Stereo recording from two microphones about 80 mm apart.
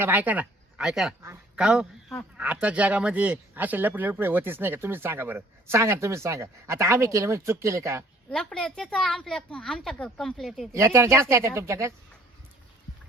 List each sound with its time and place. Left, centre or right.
0.0 s speech: right
0.8 s a man's voice: centre; by 8.0 s right
8.3 s speech: centre
10.7 s speech: right